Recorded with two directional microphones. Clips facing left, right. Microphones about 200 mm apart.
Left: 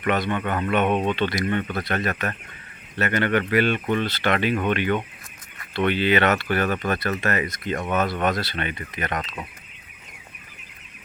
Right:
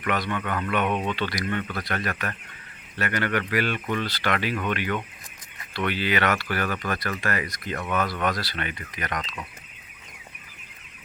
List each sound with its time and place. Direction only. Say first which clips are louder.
0.0 s speech: left 4 dB; 25° left (ahead or behind)